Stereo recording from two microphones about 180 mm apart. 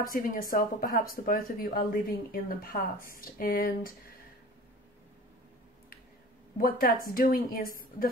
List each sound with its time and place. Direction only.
0.1 s speech: 50° left (ahead or behind)
6.6 s speech: 55° left (ahead or behind)